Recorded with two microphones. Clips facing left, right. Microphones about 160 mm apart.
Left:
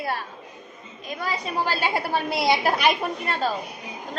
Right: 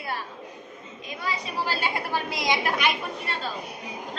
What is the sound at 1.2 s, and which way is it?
A woman's voice, 45° left (ahead or behind).